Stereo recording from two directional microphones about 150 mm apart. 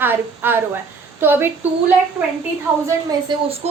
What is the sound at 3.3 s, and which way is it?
Speech, 30° right (ahead or behind).